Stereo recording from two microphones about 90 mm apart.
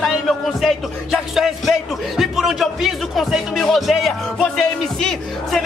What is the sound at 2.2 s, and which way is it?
Speech, centre (ahead or behind).